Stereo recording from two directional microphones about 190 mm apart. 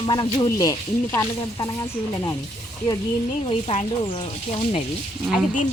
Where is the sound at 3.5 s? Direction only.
30° left (ahead or behind).